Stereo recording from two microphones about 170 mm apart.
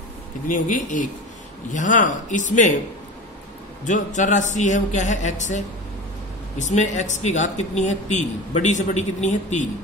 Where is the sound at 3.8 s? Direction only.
45° left (ahead or behind).